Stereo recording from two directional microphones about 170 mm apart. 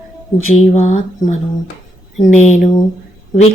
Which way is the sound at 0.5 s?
40° left (ahead or behind).